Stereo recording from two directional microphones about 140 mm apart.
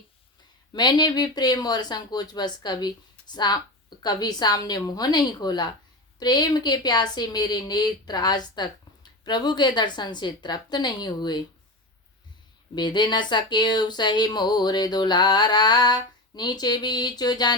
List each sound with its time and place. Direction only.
0.7 s a woman's voice: 30° left (ahead or behind)
12.7 s speech: 30° left (ahead or behind)